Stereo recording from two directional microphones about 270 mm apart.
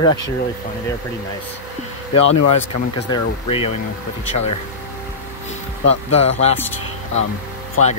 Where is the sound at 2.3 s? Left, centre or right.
Left.